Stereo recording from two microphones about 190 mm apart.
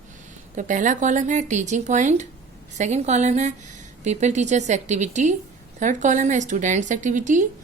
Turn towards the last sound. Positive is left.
turn(degrees=-40)  # may be behind; listen again after turning